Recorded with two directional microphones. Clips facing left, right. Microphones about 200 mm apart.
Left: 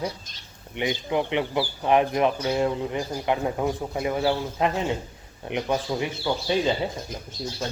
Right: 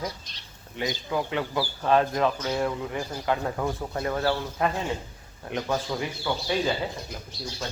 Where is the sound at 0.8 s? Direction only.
20° left (ahead or behind).